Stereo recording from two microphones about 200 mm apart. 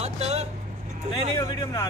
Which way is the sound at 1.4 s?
15° left (ahead or behind).